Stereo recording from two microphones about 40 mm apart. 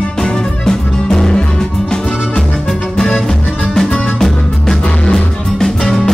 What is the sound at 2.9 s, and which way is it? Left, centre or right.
Music, centre.